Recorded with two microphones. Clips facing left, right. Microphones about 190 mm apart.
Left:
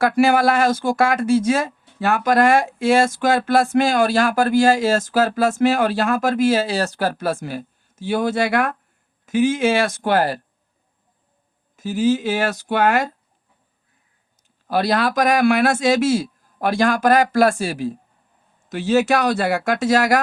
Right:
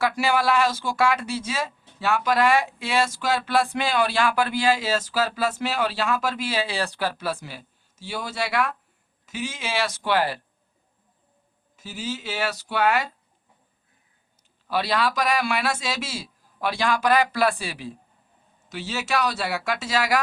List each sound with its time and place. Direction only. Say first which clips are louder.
0.0 s speech: left 7 dB; 50° left (ahead or behind)
11.8 s speech: left 14 dB; 50° left (ahead or behind)
14.7 s speech: left 5 dB; 45° left (ahead or behind)